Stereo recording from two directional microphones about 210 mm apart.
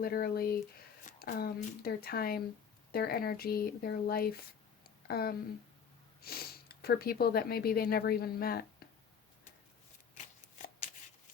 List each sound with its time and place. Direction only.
0.0 s speech: 45° left (ahead or behind)